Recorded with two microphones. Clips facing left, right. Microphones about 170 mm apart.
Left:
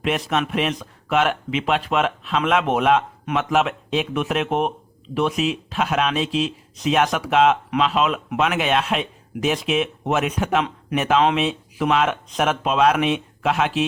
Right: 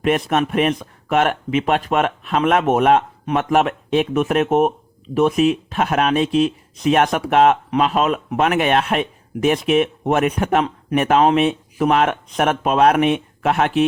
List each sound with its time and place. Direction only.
0.0 s speech: 50° right (ahead or behind)